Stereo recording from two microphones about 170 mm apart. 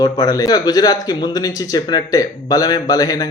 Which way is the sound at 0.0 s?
20° left (ahead or behind).